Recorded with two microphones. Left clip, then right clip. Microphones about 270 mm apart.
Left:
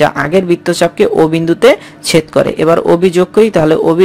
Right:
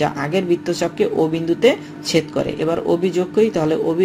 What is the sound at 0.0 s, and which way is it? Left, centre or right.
Speech, left.